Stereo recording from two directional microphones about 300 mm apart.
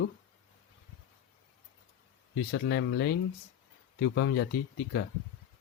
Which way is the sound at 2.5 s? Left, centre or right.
Left.